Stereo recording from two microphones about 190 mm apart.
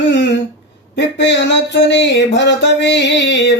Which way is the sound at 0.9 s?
70° left (ahead or behind).